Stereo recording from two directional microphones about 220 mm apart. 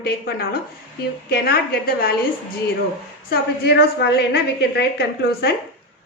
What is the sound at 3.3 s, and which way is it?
A woman's voice, 45° left (ahead or behind).